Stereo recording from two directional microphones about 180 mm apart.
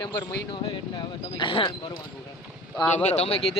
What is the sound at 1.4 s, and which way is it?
Speech, 25° left (ahead or behind).